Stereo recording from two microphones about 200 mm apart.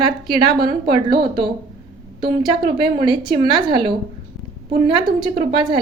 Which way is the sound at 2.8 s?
25° right (ahead or behind).